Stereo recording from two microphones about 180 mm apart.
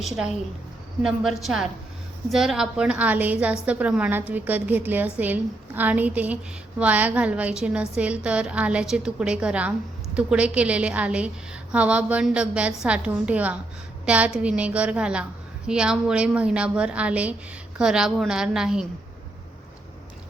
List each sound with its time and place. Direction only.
0.0 s a woman's voice: 5° right (ahead or behind)